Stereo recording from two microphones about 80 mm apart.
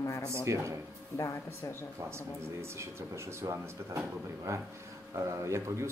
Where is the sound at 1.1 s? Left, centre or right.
Left.